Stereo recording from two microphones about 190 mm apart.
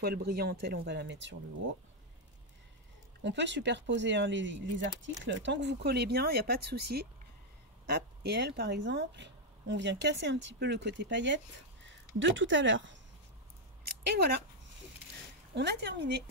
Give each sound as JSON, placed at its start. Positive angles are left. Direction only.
{"t": 0.0, "sound": "speech", "side_deg": -55}
{"t": 3.3, "sound": "a woman's voice", "side_deg": -70}
{"t": 14.1, "sound": "speech", "side_deg": -55}
{"t": 15.5, "sound": "speech", "side_deg": -60}